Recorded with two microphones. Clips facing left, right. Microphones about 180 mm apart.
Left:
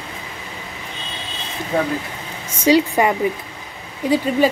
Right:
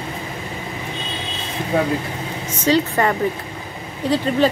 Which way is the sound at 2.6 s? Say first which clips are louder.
Left 3 dB; 10° left (ahead or behind).